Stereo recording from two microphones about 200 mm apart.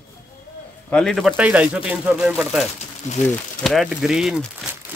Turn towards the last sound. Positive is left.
turn(degrees=0)  # may be behind; listen again after turning